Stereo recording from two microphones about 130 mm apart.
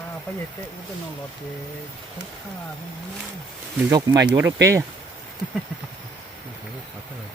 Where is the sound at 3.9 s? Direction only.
30° right (ahead or behind).